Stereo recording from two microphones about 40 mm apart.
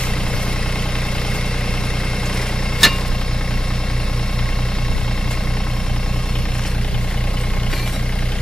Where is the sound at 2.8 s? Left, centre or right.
Centre.